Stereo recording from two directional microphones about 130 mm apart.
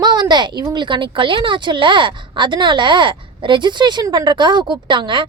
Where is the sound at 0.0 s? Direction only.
30° right (ahead or behind).